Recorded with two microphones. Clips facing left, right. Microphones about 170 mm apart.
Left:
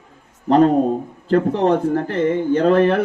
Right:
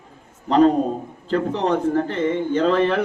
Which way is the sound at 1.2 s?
55° left (ahead or behind).